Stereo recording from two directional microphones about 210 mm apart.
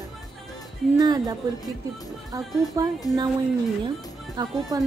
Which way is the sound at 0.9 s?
20° right (ahead or behind).